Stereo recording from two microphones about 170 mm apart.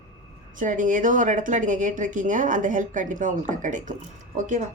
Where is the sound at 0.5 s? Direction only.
50° right (ahead or behind).